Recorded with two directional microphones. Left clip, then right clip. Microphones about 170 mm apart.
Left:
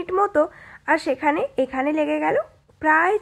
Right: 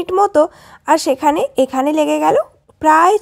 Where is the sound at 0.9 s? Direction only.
45° right (ahead or behind).